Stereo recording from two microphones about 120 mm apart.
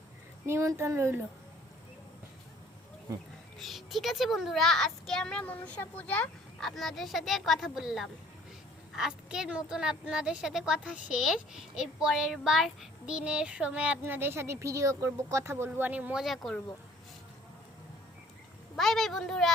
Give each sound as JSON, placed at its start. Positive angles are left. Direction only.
{"t": 0.4, "sound": "speech", "side_deg": -25}
{"t": 3.6, "sound": "a child's voice", "side_deg": 0}
{"t": 16.2, "sound": "a child's voice", "side_deg": 0}
{"t": 18.8, "sound": "a child's voice", "side_deg": 0}